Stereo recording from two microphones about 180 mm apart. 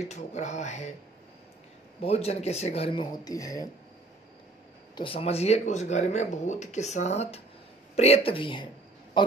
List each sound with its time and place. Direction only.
0.1 s speech: 40° left (ahead or behind)
2.0 s speech: 35° left (ahead or behind); by 3.6 s 20° left (ahead or behind)
4.9 s speech: 30° left (ahead or behind)